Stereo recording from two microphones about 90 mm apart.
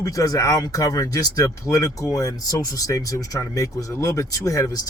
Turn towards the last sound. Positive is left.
turn(degrees=40)  # may be behind; listen again after turning